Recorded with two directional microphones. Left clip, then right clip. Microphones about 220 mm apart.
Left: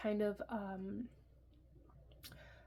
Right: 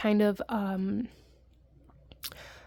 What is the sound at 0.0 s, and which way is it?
Speech, 50° right (ahead or behind).